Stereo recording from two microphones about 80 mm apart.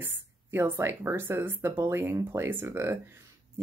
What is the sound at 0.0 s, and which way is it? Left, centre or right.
A woman's voice, right.